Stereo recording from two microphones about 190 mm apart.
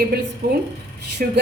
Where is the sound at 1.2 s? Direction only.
45° right (ahead or behind).